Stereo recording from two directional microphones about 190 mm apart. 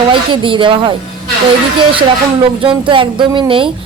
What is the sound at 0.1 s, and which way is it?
Speech, 25° right (ahead or behind).